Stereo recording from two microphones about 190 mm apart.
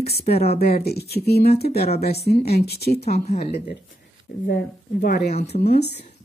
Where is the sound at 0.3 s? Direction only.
55° left (ahead or behind).